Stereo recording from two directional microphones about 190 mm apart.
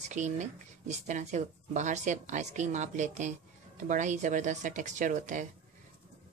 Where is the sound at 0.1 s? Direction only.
40° right (ahead or behind).